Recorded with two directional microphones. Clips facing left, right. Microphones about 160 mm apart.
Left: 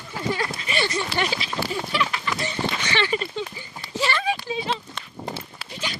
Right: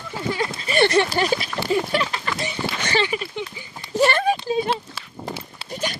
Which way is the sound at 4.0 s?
50° right (ahead or behind).